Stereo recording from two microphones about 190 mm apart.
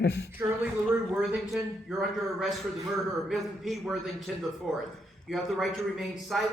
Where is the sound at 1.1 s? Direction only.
5° right (ahead or behind).